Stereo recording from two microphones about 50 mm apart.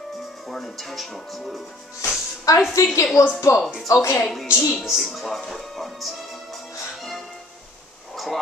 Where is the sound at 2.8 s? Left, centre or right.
Left.